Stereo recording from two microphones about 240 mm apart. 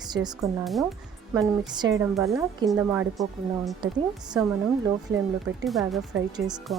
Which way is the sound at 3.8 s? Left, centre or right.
Centre.